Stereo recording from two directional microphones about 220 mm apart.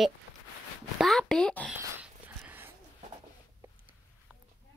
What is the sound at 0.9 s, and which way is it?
Speech, centre (ahead or behind).